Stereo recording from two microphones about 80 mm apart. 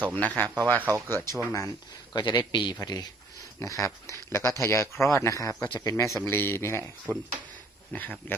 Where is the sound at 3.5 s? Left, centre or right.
Left.